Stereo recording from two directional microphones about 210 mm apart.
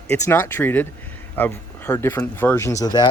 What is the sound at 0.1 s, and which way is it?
Speech, 10° left (ahead or behind).